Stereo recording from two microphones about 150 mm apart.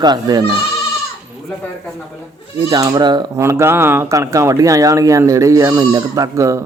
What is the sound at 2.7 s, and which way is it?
Speech, 30° right (ahead or behind).